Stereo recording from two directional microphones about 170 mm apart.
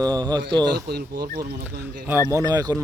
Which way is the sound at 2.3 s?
25° right (ahead or behind).